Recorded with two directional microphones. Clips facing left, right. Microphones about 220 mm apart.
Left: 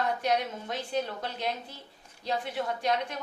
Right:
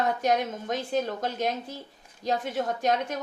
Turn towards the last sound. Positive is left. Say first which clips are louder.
# right 3 dB
turn(degrees=-45)  # may be behind; listen again after turning